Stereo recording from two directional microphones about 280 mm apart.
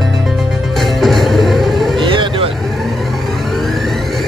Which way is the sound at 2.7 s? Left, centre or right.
Centre.